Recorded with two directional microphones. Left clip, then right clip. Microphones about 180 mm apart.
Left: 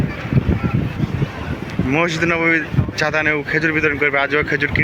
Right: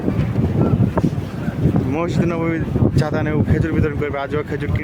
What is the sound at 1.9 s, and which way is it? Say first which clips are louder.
Speech: left 9 dB; 15° right (ahead or behind).